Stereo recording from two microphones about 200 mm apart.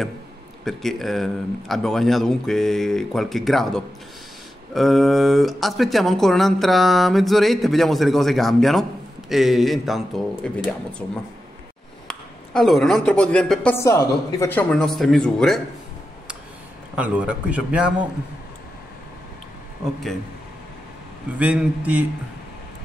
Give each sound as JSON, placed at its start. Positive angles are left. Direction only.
{"t": 0.7, "sound": "speech", "side_deg": 0}
{"t": 12.1, "sound": "speech", "side_deg": 0}
{"t": 16.9, "sound": "speech", "side_deg": -5}
{"t": 21.4, "sound": "a man's voice", "side_deg": -5}